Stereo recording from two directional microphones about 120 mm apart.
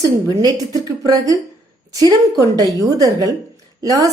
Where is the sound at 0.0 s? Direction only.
35° right (ahead or behind).